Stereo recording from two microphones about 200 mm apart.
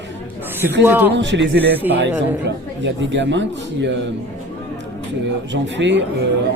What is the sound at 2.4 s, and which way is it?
A man's voice, 65° right (ahead or behind).